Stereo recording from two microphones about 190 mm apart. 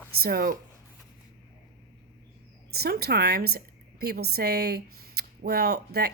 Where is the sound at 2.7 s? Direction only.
55° right (ahead or behind).